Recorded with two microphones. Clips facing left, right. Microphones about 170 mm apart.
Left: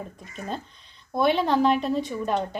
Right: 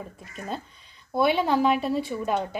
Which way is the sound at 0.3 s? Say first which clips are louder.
Left 1 dB; 5° right (ahead or behind).